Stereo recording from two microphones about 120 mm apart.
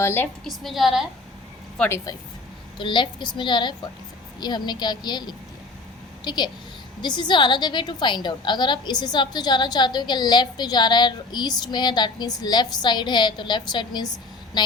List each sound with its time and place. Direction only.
0.0 s a woman's voice: 20° left (ahead or behind)
0.4 s a woman's voice: centre (ahead or behind)
2.1 s a woman's voice: 30° left (ahead or behind)
2.7 s a woman's voice: 45° left (ahead or behind)